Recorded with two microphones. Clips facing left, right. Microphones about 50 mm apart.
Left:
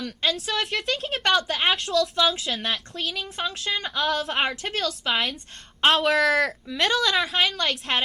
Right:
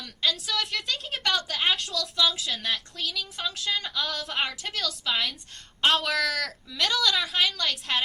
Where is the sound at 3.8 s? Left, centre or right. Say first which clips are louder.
Left 6 dB; left.